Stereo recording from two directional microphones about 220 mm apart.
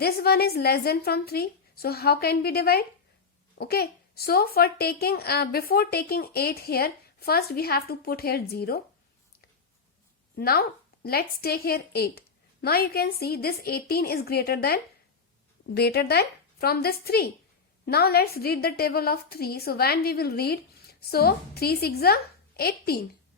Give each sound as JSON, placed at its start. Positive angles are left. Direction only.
{"t": 0.0, "sound": "speech", "side_deg": 45}
{"t": 10.3, "sound": "speech", "side_deg": 45}